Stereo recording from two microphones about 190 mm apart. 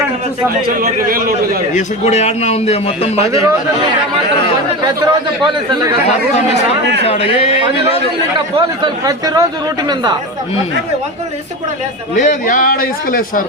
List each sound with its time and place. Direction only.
0.7 s a man's voice: 50° right (ahead or behind)
1.7 s a man's voice: 35° left (ahead or behind)
4.9 s a man's voice: 20° right (ahead or behind)
6.1 s a man's voice: 35° left (ahead or behind)
8.5 s a man's voice: 20° right (ahead or behind)
12.1 s a man's voice: 40° left (ahead or behind)